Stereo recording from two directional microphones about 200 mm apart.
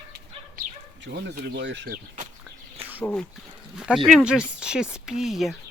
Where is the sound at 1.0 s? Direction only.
55° right (ahead or behind).